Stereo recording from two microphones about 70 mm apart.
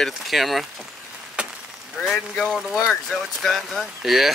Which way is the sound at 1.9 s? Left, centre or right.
Centre.